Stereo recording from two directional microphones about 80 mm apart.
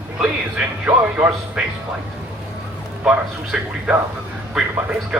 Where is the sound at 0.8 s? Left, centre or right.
Centre.